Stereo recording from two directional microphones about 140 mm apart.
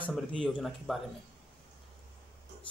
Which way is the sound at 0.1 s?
5° left (ahead or behind).